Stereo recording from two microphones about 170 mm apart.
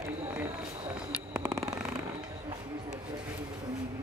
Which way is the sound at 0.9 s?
5° right (ahead or behind).